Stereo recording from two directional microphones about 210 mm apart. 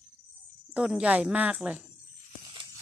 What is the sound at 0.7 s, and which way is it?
Speech, 5° right (ahead or behind).